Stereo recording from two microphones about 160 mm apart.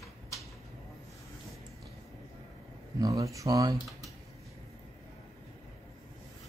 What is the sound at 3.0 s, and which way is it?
Speech, 20° right (ahead or behind).